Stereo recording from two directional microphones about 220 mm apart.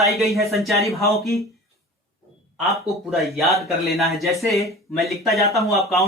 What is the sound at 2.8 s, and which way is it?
Speech, centre (ahead or behind).